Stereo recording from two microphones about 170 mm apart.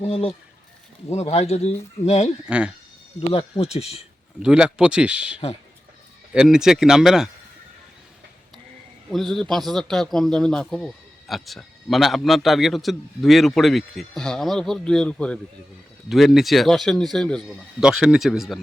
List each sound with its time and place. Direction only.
0.0 s speech: 35° left (ahead or behind)
2.5 s speech: 5° right (ahead or behind)
3.6 s speech: 40° left (ahead or behind)
4.4 s speech: 5° right (ahead or behind)
9.1 s speech: centre (ahead or behind)